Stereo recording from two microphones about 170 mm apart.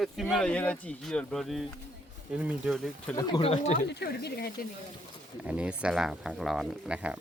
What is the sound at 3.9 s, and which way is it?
Speech, 75° left (ahead or behind).